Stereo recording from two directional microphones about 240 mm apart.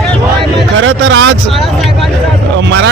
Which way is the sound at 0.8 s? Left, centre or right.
Right.